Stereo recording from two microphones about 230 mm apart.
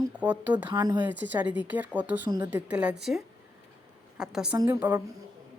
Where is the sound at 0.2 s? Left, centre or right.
Centre.